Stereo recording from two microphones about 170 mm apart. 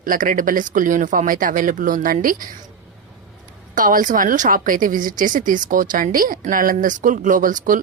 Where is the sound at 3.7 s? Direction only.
55° right (ahead or behind).